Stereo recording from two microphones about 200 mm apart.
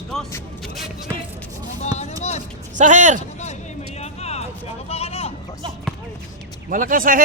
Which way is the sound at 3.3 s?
35° left (ahead or behind).